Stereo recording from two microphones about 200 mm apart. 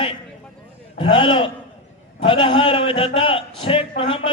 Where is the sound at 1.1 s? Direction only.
25° left (ahead or behind).